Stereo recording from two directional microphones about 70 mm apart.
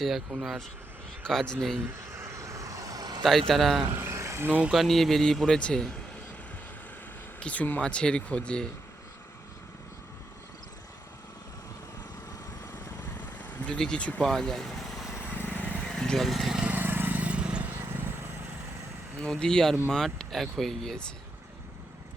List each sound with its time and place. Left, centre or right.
0.0 s speech: centre
1.2 s speech: centre
2.1 s vehicle: right
3.2 s speech: centre
3.9 s a sound: right
4.4 s speech: right
4.7 s speech: centre
7.3 s speech: centre
13.4 s vehicle: left
13.7 s speech: centre
15.4 s vehicle: left
15.9 s lawn mower: centre
16.7 s vehicle: right
19.2 s speech: centre